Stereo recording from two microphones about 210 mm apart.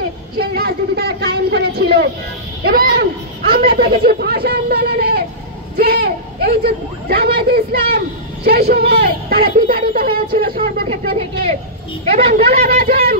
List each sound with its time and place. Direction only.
0.4 s speech: 50° right (ahead or behind)
10.9 s speech: 30° right (ahead or behind)